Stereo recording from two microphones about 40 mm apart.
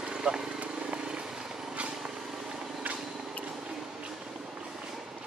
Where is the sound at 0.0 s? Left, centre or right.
Centre.